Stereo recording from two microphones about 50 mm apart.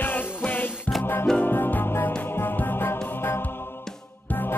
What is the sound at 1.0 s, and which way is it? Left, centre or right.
Music, left.